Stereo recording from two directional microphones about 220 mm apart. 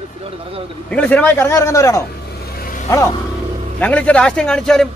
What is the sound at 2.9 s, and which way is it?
A man's voice, 15° left (ahead or behind).